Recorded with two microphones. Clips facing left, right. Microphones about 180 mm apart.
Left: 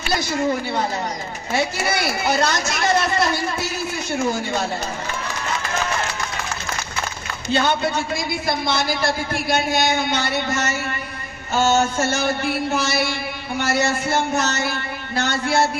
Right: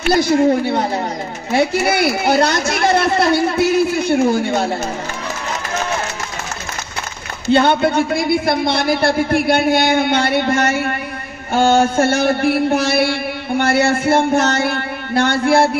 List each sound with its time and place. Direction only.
0.0 s a man's voice: 60° right (ahead or behind)
7.5 s a man's voice: 60° right (ahead or behind)